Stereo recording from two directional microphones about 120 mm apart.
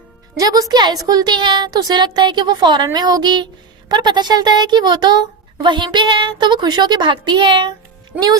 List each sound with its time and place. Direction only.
0.3 s a woman's voice: 30° right (ahead or behind)